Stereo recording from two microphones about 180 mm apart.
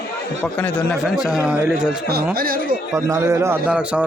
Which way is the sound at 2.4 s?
55° right (ahead or behind).